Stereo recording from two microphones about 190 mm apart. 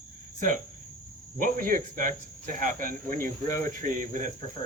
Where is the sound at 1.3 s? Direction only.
45° right (ahead or behind).